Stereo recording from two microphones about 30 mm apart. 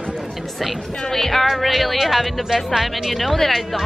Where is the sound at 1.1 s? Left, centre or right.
Centre.